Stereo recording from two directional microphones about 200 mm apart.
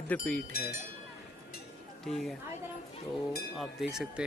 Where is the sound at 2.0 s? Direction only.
Centre (ahead or behind).